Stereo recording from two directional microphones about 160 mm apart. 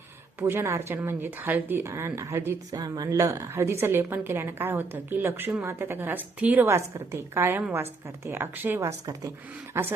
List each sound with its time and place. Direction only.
0.3 s speech: 15° right (ahead or behind)